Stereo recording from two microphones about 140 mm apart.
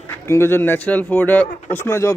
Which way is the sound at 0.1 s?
20° left (ahead or behind).